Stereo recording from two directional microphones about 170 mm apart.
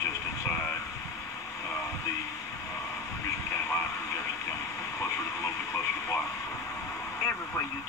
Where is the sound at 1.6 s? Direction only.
20° left (ahead or behind).